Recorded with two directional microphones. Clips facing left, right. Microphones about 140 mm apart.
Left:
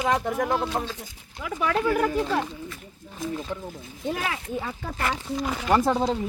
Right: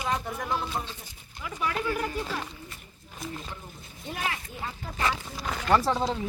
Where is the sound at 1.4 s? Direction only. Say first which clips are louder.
Left 6 dB; 90° left.